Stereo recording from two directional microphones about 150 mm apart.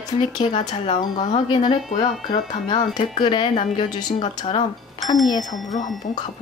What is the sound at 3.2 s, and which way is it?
Speech, 30° left (ahead or behind).